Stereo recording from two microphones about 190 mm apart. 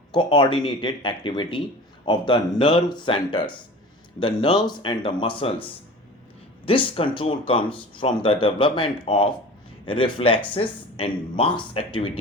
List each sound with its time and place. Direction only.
0.1 s speech: 25° left (ahead or behind)
6.7 s speech: 30° left (ahead or behind)